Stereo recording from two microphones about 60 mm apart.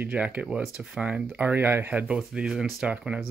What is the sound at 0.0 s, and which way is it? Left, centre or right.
Speech, right.